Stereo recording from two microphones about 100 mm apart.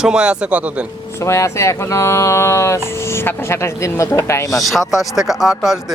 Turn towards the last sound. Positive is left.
turn(degrees=-5)  # may be behind; listen again after turning